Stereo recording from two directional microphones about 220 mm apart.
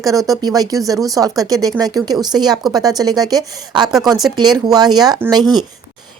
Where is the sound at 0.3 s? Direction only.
15° right (ahead or behind).